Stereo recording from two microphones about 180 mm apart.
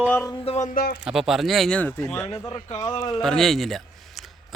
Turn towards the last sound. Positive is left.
turn(degrees=0)  # may be behind; listen again after turning